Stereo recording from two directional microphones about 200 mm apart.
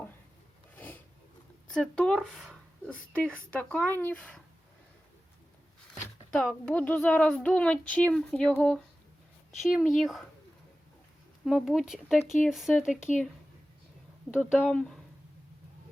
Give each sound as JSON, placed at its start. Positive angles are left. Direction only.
{"t": 0.8, "sound": "a sound", "side_deg": 10}
{"t": 1.7, "sound": "speech", "side_deg": 5}
{"t": 5.9, "sound": "speech", "side_deg": 5}
{"t": 11.4, "sound": "speech", "side_deg": 0}
{"t": 13.1, "sound": "speech", "side_deg": 40}
{"t": 14.5, "sound": "speech", "side_deg": 5}